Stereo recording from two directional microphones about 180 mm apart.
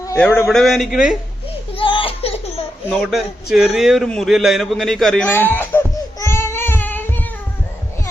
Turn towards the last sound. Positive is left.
turn(degrees=10)  # may be behind; listen again after turning